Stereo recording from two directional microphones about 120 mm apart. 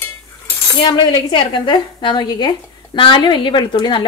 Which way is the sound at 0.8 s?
40° left (ahead or behind).